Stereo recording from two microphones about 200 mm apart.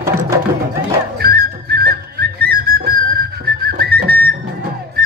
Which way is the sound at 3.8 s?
50° right (ahead or behind).